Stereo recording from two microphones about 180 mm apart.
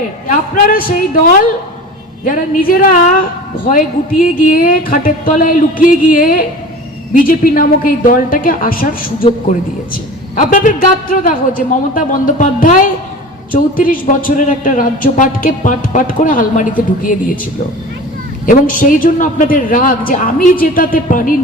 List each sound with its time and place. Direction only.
0.3 s a man's voice: 50° left (ahead or behind)
18.4 s a man's voice: 50° left (ahead or behind)